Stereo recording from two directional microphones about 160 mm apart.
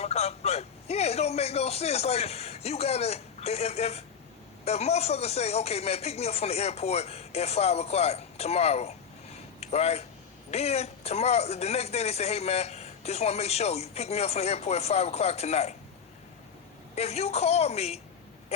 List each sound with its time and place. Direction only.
0.0 s a man's voice: 40° left (ahead or behind)
16.9 s speech: 40° left (ahead or behind)